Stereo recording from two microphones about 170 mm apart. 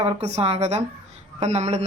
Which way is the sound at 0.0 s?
35° right (ahead or behind).